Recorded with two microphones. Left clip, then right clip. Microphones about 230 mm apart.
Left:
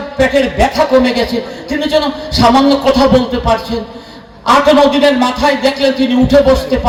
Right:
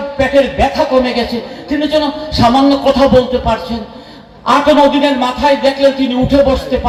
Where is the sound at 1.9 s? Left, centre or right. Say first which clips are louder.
Left 3 dB; left.